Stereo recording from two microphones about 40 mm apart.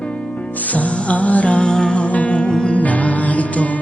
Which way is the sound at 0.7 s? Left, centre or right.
Left.